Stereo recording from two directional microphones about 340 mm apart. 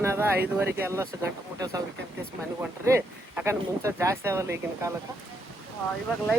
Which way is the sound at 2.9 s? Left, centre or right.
Centre.